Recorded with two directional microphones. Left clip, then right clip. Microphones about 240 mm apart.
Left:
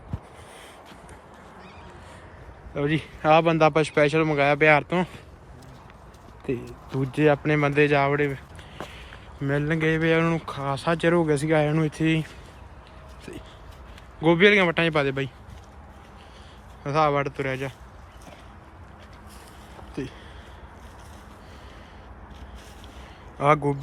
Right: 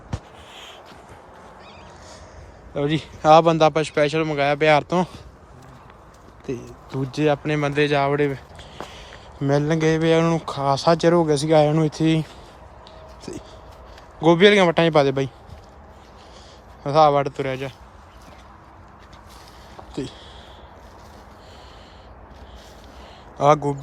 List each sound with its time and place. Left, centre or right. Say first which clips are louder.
2.7 s speech: right 3 dB; centre
6.4 s speech: left 1 dB; centre
16.8 s speech: right 6 dB; centre
23.4 s speech: right 4 dB; centre